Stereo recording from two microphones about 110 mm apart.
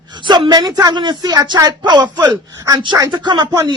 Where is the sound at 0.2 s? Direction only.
45° right (ahead or behind).